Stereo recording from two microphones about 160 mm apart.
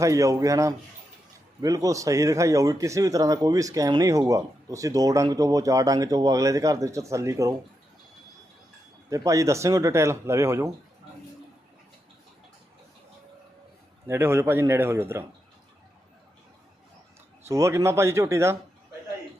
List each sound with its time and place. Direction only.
0.0 s speech: 20° right (ahead or behind)
9.0 s speech: 20° right (ahead or behind)
14.1 s speech: 15° right (ahead or behind)
17.5 s speech: 20° right (ahead or behind)